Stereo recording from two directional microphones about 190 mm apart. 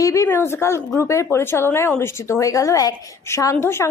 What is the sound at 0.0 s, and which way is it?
Speech, 15° left (ahead or behind).